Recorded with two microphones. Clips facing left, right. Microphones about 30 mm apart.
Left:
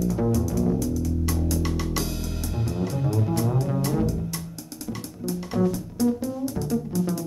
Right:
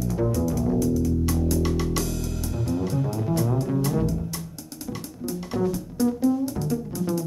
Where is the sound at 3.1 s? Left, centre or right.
Centre.